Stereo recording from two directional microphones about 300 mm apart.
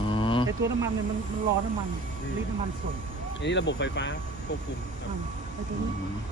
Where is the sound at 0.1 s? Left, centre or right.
Centre.